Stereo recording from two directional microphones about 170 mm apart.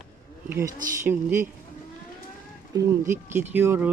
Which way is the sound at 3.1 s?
15° right (ahead or behind).